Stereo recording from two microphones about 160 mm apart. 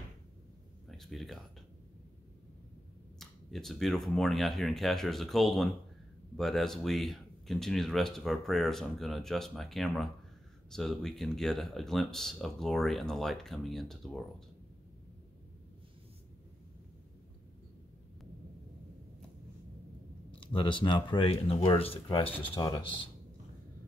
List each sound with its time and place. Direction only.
0.8 s speech: centre (ahead or behind)
3.2 s speech: centre (ahead or behind)
20.2 s speech: 30° left (ahead or behind)